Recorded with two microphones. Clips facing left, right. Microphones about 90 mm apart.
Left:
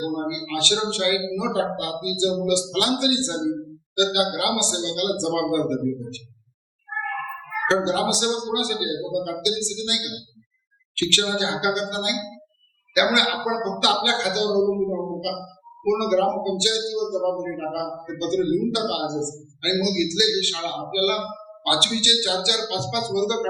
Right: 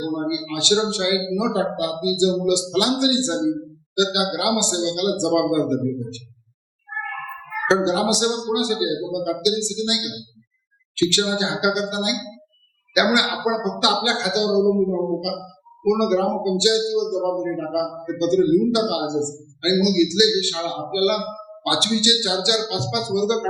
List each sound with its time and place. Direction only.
0.2 s a man's voice: 15° right (ahead or behind)
7.7 s a man's voice: 20° right (ahead or behind)